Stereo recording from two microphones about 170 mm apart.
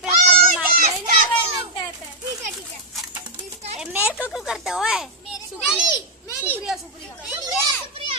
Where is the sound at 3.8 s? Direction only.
10° right (ahead or behind).